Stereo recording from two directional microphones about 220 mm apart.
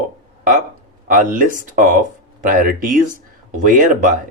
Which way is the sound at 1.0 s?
40° right (ahead or behind).